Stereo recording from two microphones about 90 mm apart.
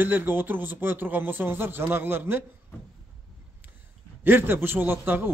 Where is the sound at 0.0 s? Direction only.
20° right (ahead or behind).